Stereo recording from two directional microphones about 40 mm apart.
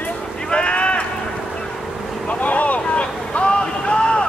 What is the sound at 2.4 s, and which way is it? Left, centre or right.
Vehicle, left.